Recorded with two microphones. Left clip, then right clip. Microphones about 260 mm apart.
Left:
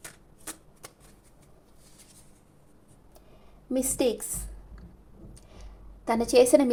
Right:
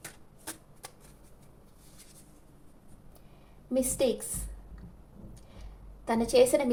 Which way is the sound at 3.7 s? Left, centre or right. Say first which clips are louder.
Left 1 dB; left.